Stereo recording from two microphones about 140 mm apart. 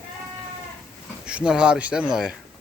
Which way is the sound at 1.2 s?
5° right (ahead or behind).